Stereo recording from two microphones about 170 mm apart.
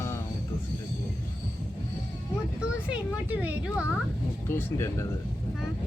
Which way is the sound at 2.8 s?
10° right (ahead or behind).